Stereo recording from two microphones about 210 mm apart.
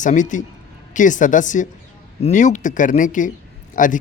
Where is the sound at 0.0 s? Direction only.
35° left (ahead or behind).